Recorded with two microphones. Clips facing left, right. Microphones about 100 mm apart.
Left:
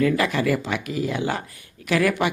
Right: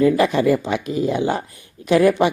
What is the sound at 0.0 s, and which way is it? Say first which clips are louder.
Speech: right 5 dB; 20° right (ahead or behind).